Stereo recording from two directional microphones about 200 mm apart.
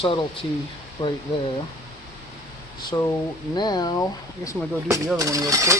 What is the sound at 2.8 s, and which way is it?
Speech, 15° left (ahead or behind).